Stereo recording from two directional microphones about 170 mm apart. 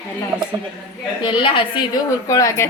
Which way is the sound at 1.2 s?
30° left (ahead or behind).